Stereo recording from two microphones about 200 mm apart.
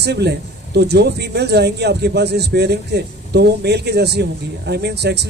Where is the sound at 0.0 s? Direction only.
55° right (ahead or behind).